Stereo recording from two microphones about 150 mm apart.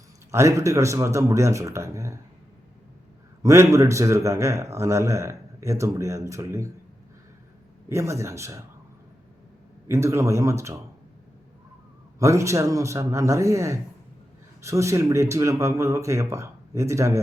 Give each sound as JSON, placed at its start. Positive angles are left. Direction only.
{"t": 0.3, "sound": "a man's voice", "side_deg": -20}
{"t": 3.4, "sound": "a man's voice", "side_deg": -20}
{"t": 7.9, "sound": "a man's voice", "side_deg": -20}
{"t": 9.8, "sound": "a man's voice", "side_deg": -20}
{"t": 12.2, "sound": "a man's voice", "side_deg": -20}